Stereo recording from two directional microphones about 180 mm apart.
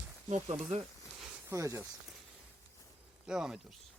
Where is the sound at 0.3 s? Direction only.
40° right (ahead or behind).